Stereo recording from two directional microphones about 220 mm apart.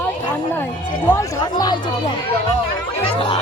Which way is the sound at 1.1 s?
15° left (ahead or behind).